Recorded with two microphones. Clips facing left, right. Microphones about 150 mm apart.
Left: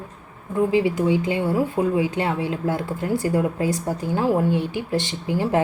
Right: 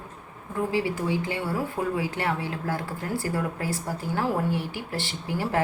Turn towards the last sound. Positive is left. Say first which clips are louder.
# left 5 dB
turn(degrees=20)  # may be behind; listen again after turning